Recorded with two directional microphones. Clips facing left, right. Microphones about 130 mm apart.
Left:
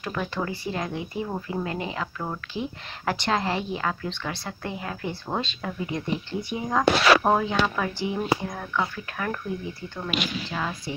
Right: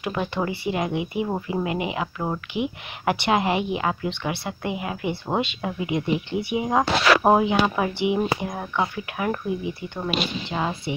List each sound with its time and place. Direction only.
0.0 s speech: 20° right (ahead or behind)